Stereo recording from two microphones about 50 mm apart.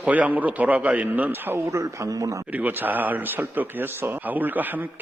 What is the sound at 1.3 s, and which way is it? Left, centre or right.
Speech, right.